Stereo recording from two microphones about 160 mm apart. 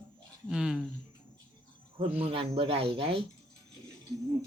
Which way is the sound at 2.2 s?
35° right (ahead or behind).